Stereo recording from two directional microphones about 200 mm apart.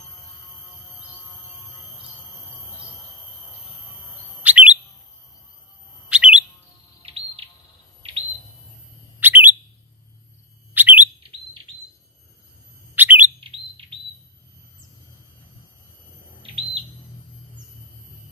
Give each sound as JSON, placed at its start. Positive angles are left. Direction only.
{"t": 4.4, "sound": "chirp", "side_deg": -5}
{"t": 6.0, "sound": "chirp", "side_deg": -5}
{"t": 7.0, "sound": "bird vocalization", "side_deg": -30}
{"t": 9.2, "sound": "bird", "side_deg": -10}
{"t": 10.7, "sound": "chirp", "side_deg": -10}
{"t": 12.9, "sound": "chirp", "side_deg": -10}
{"t": 13.4, "sound": "bird", "side_deg": -25}